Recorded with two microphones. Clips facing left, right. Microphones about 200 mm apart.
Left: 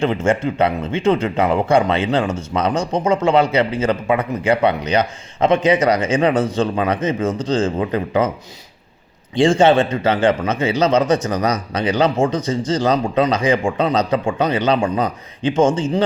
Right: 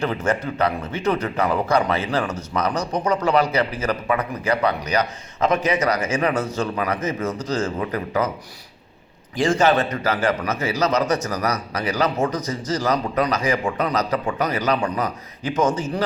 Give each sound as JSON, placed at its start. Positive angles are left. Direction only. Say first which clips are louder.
{"t": 0.0, "sound": "a man's voice", "louder": "left 5 dB", "side_deg": 25}
{"t": 9.3, "sound": "a man's voice", "louder": "left 5 dB", "side_deg": 30}